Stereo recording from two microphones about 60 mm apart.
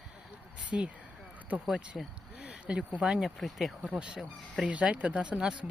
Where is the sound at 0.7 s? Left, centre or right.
Centre.